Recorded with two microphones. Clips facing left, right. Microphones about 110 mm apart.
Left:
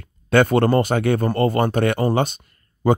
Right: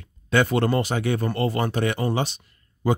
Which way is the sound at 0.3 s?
50° left (ahead or behind).